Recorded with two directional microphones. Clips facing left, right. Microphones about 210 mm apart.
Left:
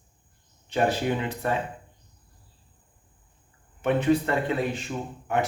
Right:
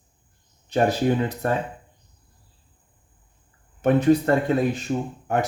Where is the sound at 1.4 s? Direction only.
45° right (ahead or behind).